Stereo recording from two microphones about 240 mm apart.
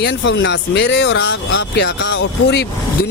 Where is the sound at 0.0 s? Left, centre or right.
Left.